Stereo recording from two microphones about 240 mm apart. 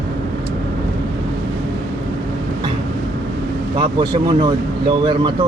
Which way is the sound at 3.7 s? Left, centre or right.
Right.